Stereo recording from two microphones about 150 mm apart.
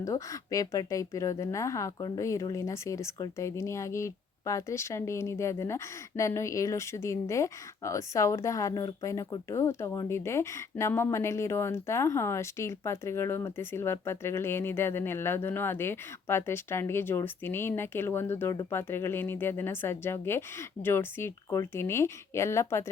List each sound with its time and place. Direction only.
0.0 s speech: 20° left (ahead or behind)